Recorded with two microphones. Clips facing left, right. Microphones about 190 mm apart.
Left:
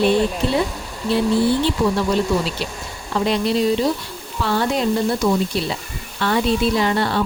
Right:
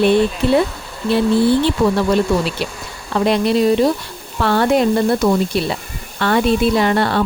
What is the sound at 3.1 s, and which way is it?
A woman's voice, 60° right (ahead or behind).